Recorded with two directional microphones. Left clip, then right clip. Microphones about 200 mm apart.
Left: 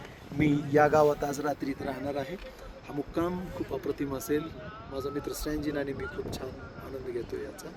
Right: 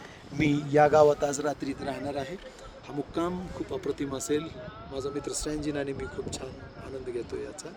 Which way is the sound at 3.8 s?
25° right (ahead or behind).